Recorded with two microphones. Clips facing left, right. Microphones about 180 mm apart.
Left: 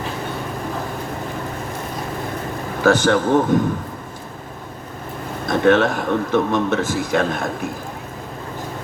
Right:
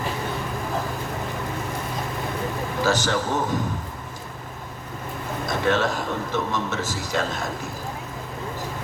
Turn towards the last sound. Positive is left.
turn(degrees=55)  # may be behind; listen again after turning